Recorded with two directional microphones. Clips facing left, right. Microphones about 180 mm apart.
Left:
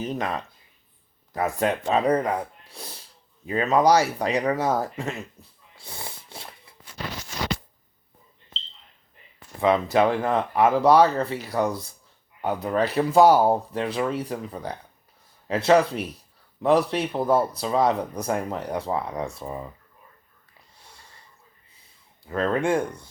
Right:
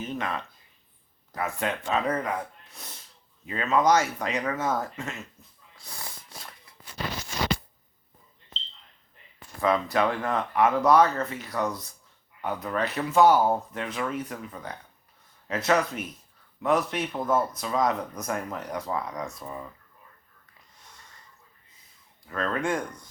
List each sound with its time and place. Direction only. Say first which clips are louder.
0.0 s speech: left 4 dB; 35° left (ahead or behind)
9.6 s speech: left 4 dB; 25° left (ahead or behind)
20.7 s snort: left 2 dB; 30° left (ahead or behind)
22.3 s speech: left 5 dB; 30° left (ahead or behind)